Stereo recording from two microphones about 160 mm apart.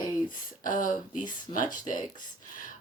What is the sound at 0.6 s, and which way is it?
Speech, 55° left (ahead or behind).